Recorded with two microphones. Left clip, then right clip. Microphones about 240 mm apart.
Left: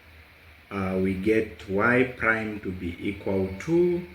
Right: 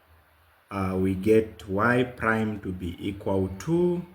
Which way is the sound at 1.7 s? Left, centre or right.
Right.